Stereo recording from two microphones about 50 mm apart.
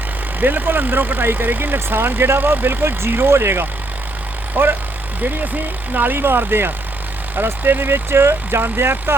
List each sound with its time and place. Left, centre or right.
0.3 s speech: right
5.9 s speech: right
6.1 s speech: right